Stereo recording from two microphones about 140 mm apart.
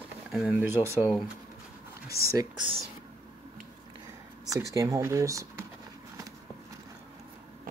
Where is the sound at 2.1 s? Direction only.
90° left.